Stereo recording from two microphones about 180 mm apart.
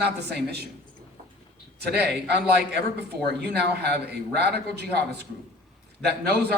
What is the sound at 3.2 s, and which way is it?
A man's voice, 65° right (ahead or behind).